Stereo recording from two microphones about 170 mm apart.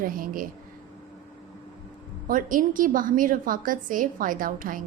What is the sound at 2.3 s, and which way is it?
A woman's voice, 50° right (ahead or behind).